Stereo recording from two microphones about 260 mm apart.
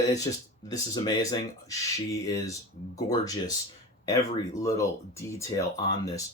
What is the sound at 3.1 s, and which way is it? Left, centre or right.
Speech, centre.